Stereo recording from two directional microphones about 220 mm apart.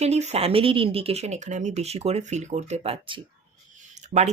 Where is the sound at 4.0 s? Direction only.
30° right (ahead or behind).